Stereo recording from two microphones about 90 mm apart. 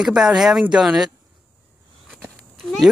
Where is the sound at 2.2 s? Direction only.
5° left (ahead or behind).